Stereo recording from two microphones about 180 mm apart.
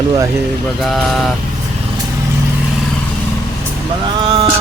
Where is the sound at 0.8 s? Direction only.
Centre (ahead or behind).